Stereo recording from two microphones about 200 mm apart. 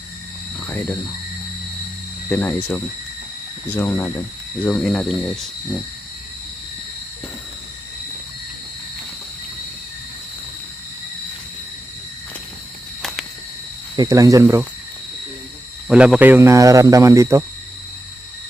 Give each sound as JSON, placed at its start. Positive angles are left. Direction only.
{"t": 2.3, "sound": "speech", "side_deg": 10}
{"t": 3.7, "sound": "speech", "side_deg": 10}
{"t": 13.0, "sound": "a sound", "side_deg": 0}
{"t": 13.9, "sound": "speech", "side_deg": -20}
{"t": 15.9, "sound": "speech", "side_deg": -5}